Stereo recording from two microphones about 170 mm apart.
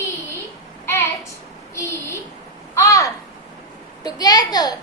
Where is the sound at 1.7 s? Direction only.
15° left (ahead or behind).